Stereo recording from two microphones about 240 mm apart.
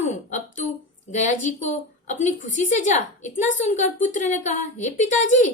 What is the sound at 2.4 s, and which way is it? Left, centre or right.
A woman's voice, left.